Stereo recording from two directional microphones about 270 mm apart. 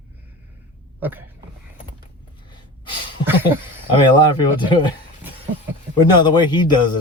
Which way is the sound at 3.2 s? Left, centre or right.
Centre.